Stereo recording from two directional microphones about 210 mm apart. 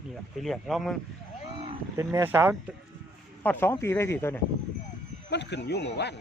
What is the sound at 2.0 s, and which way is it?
Speech, 15° right (ahead or behind).